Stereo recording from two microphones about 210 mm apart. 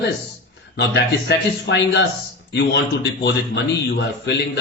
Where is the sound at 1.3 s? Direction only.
55° left (ahead or behind).